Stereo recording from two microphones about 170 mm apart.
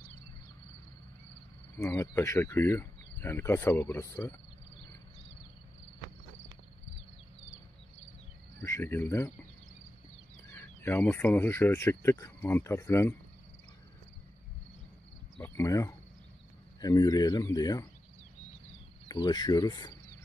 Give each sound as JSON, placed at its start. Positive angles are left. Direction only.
{"t": 1.8, "sound": "speech", "side_deg": 15}
{"t": 8.5, "sound": "cricket", "side_deg": 15}
{"t": 10.5, "sound": "speech", "side_deg": 10}
{"t": 15.3, "sound": "cricket", "side_deg": 10}
{"t": 16.8, "sound": "speech", "side_deg": 20}
{"t": 19.0, "sound": "speech", "side_deg": 25}